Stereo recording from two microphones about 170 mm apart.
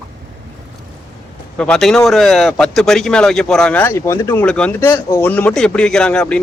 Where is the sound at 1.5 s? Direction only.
5° left (ahead or behind).